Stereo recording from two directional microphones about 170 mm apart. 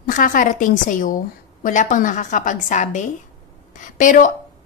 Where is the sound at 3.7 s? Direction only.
50° left (ahead or behind).